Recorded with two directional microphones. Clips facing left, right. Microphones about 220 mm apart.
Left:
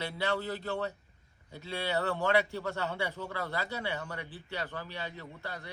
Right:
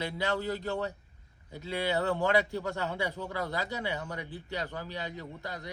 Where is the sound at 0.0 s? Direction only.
15° right (ahead or behind).